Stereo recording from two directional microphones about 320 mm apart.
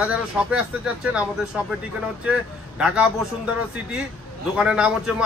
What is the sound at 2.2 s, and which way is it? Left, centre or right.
A man's voice, centre.